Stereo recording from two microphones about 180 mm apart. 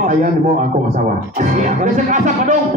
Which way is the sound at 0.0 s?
45° right (ahead or behind).